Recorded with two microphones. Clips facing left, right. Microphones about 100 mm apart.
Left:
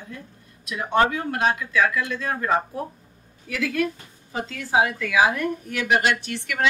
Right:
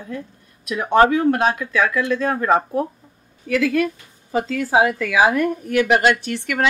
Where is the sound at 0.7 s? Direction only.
70° right (ahead or behind).